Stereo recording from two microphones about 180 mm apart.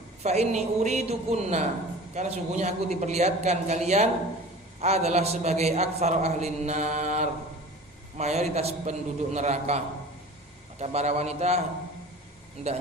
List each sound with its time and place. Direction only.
0.2 s a man's voice: 35° right (ahead or behind)